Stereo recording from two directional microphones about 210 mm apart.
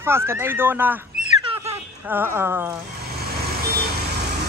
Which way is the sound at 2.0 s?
10° right (ahead or behind).